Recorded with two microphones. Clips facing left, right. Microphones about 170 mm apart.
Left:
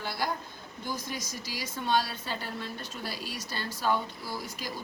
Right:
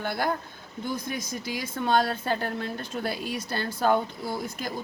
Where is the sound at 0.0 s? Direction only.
55° right (ahead or behind).